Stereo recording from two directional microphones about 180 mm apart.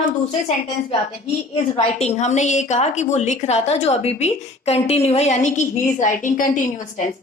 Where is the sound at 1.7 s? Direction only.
35° left (ahead or behind).